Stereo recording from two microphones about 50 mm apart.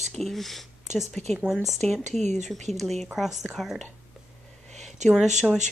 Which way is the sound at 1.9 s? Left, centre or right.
Centre.